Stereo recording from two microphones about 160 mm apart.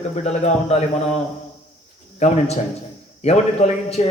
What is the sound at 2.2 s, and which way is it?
Speech, 45° left (ahead or behind).